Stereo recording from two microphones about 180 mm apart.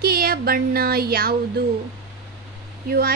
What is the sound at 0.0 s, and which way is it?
Speech, 55° right (ahead or behind).